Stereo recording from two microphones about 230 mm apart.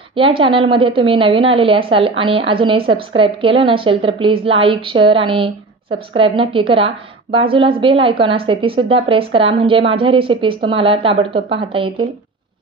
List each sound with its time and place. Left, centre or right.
0.4 s a woman's voice: right